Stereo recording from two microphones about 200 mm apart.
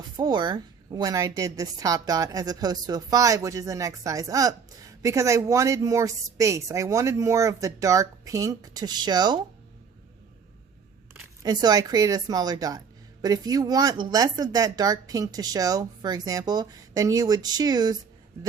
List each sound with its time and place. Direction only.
0.2 s a woman's voice: 20° right (ahead or behind)
11.4 s speech: 20° right (ahead or behind)